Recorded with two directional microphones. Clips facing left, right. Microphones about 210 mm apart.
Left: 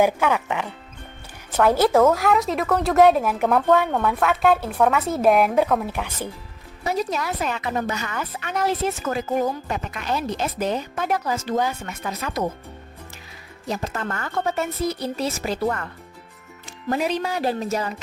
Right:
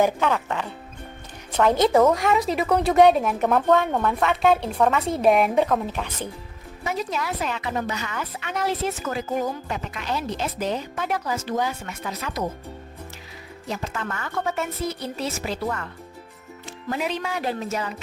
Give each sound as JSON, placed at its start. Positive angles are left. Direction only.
{"t": 0.0, "sound": "a woman's voice", "side_deg": 10}
{"t": 6.8, "sound": "a woman's voice", "side_deg": 40}
{"t": 13.7, "sound": "a woman's voice", "side_deg": 40}
{"t": 16.9, "sound": "a woman's voice", "side_deg": 40}